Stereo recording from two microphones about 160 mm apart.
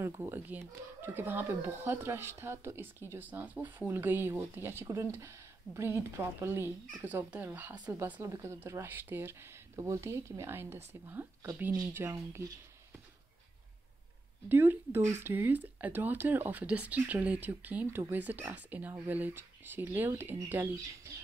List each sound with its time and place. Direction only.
0.1 s speech: 15° right (ahead or behind)
7.0 s speech: 10° right (ahead or behind)
14.5 s speech: 15° right (ahead or behind)